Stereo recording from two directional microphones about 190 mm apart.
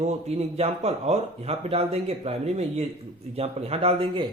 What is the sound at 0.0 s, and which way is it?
Speech, 35° right (ahead or behind).